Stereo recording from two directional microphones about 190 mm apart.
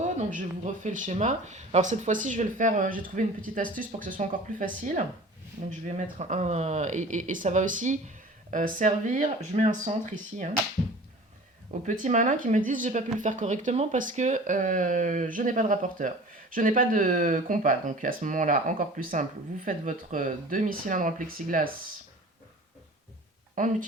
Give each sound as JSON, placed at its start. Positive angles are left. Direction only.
{"t": 0.2, "sound": "speech", "side_deg": -40}
{"t": 6.1, "sound": "speech", "side_deg": -40}
{"t": 11.9, "sound": "speech", "side_deg": -40}
{"t": 23.6, "sound": "speech", "side_deg": -45}